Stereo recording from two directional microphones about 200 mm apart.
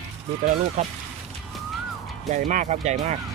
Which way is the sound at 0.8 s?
35° right (ahead or behind).